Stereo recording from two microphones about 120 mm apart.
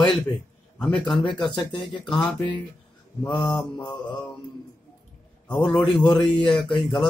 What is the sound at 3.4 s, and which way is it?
Speech, 5° left (ahead or behind).